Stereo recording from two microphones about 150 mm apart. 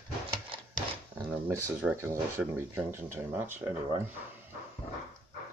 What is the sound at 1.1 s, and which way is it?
Speech, 15° right (ahead or behind).